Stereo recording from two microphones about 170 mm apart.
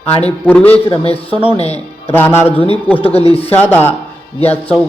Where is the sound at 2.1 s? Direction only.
10° left (ahead or behind).